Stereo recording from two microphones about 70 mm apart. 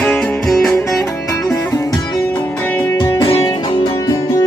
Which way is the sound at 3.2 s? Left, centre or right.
Left.